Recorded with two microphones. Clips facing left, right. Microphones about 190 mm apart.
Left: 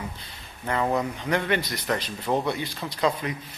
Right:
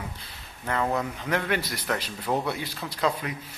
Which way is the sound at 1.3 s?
5° right (ahead or behind).